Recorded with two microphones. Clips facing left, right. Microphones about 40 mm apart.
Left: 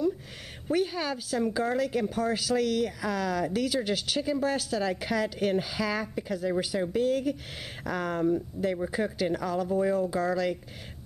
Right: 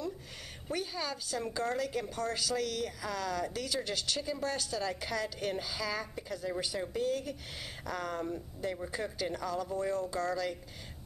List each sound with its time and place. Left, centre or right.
0.7 s a woman's voice: centre